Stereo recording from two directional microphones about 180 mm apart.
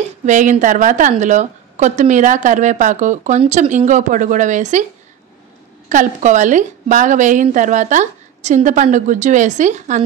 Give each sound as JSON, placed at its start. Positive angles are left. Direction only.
{"t": 0.2, "sound": "a woman's voice", "side_deg": -45}
{"t": 5.9, "sound": "a woman's voice", "side_deg": -45}